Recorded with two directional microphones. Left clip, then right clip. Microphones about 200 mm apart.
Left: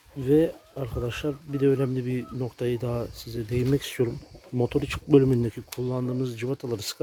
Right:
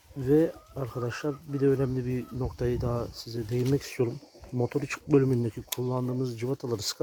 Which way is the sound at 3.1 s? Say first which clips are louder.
Left 1 dB; 20° left (ahead or behind).